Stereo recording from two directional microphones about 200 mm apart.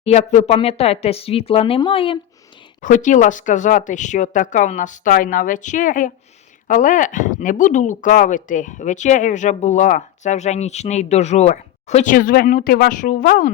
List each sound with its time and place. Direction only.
0.0 s speech: 35° left (ahead or behind)
2.8 s speech: 40° left (ahead or behind)